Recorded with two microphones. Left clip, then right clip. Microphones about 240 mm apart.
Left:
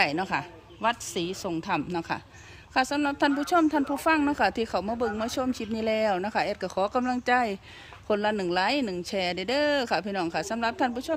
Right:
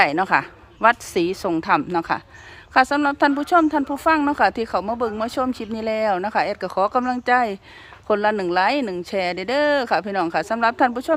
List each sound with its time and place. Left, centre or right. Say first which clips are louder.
0.0 s speech: right 9 dB; centre